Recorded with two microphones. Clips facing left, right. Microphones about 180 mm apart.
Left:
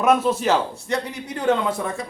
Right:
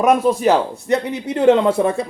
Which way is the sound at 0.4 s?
15° right (ahead or behind).